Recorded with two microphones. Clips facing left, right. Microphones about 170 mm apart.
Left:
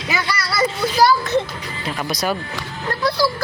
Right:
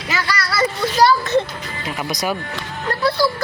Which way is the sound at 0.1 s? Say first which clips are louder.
Right 1 dB; 15° left (ahead or behind).